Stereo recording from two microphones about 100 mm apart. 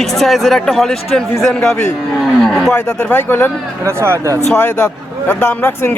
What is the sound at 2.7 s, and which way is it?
Speech, 25° left (ahead or behind).